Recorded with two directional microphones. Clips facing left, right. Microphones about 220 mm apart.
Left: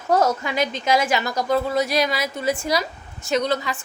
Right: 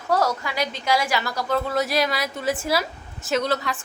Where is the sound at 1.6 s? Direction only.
Centre (ahead or behind).